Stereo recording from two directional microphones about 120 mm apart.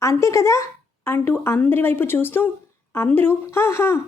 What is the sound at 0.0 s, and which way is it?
A woman's voice, 25° left (ahead or behind).